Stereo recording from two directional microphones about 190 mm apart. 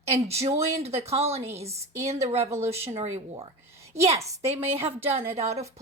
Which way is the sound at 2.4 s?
15° right (ahead or behind).